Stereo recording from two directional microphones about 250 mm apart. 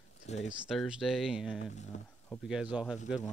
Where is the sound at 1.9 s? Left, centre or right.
Left.